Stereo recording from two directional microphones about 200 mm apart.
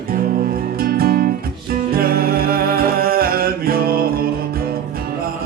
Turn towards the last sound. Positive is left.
turn(degrees=-50)  # may be behind; listen again after turning